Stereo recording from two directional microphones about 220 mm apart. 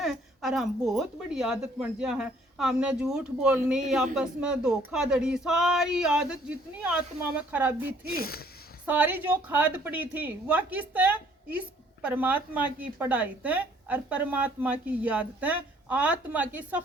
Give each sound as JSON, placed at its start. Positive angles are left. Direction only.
{"t": 0.0, "sound": "a woman's voice", "side_deg": 0}
{"t": 8.0, "sound": "speech", "side_deg": 45}
{"t": 8.9, "sound": "a woman's voice", "side_deg": -5}